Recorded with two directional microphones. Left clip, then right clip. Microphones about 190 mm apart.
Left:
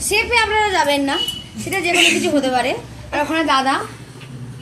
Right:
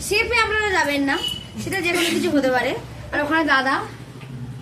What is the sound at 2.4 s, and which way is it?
A woman's voice, 25° left (ahead or behind).